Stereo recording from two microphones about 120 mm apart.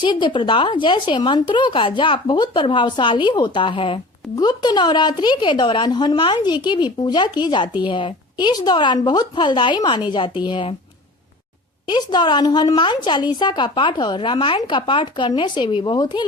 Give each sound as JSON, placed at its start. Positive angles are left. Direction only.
{"t": 0.0, "sound": "a woman's voice", "side_deg": 40}
{"t": 4.4, "sound": "a woman's voice", "side_deg": 35}
{"t": 11.9, "sound": "a woman's voice", "side_deg": 35}